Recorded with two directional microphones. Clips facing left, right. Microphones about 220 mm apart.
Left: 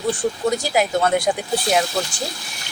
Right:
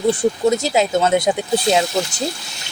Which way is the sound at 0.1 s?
25° right (ahead or behind).